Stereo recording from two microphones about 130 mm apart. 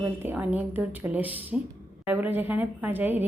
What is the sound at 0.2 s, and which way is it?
A woman's voice, 15° right (ahead or behind).